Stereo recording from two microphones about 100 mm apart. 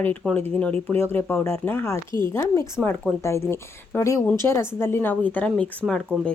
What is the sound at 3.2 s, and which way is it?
Speech, 25° left (ahead or behind).